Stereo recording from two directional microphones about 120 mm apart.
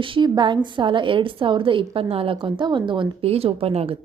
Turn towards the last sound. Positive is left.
turn(degrees=-55)  # may be behind; listen again after turning